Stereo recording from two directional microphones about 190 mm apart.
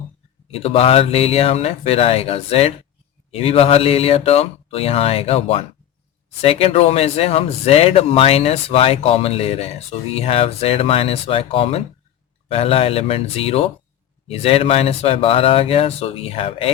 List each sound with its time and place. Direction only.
0.5 s speech: 30° left (ahead or behind)